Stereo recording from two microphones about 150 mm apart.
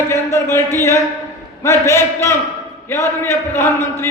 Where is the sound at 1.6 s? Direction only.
20° left (ahead or behind).